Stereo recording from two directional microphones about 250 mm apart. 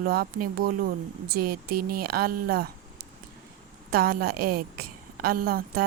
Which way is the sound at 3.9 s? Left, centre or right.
Right.